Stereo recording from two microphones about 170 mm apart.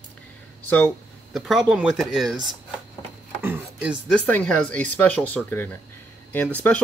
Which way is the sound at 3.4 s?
10° right (ahead or behind).